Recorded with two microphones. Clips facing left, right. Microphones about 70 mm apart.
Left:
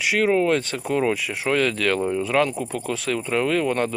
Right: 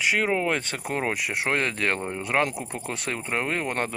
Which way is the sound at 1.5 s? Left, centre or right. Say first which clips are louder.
Left 8 dB; right.